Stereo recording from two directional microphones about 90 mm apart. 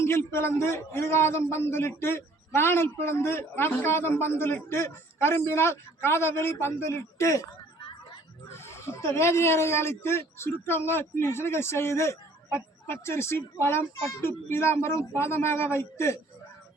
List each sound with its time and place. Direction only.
0.0 s speech: 30° left (ahead or behind)
8.4 s speech: 30° left (ahead or behind)